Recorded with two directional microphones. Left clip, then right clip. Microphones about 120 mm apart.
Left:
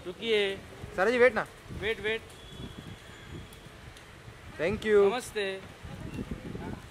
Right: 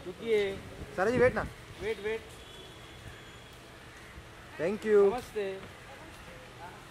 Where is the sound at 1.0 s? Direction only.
10° left (ahead or behind).